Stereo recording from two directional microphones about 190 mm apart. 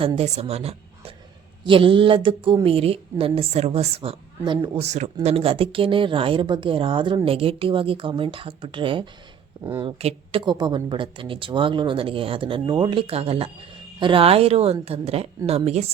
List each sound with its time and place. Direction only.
0.0 s a woman's voice: 30° right (ahead or behind)